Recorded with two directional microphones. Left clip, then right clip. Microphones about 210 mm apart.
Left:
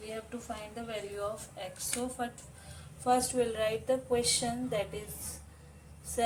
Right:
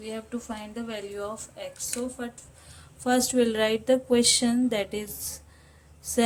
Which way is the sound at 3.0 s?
45° right (ahead or behind).